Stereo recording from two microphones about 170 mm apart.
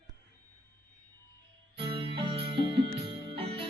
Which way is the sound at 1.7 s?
30° right (ahead or behind).